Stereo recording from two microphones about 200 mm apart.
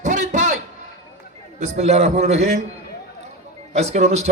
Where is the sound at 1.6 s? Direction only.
35° right (ahead or behind).